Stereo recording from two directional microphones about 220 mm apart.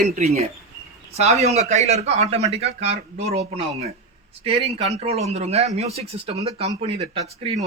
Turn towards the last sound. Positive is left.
turn(degrees=-25)  # may be behind; listen again after turning